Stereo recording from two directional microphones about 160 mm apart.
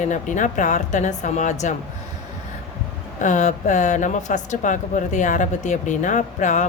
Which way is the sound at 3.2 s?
50° left (ahead or behind).